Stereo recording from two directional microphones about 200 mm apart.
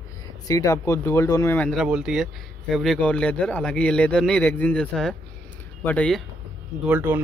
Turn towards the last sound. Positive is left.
turn(degrees=-10)  # may be behind; listen again after turning